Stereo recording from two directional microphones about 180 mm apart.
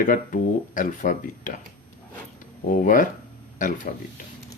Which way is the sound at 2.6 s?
45° left (ahead or behind).